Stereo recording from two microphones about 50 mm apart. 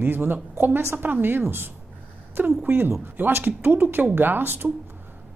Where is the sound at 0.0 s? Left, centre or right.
Right.